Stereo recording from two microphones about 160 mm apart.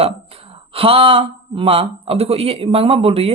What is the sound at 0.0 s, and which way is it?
Speech, 35° right (ahead or behind).